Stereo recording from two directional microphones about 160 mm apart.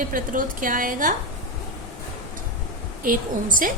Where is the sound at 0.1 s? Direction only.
55° right (ahead or behind).